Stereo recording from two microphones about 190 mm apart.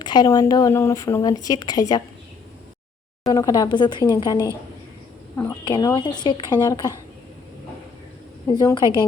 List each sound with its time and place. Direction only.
0.0 s speech: 20° left (ahead or behind)
3.2 s speech: 20° left (ahead or behind)
5.6 s speech: 20° left (ahead or behind)
8.5 s speech: 20° left (ahead or behind)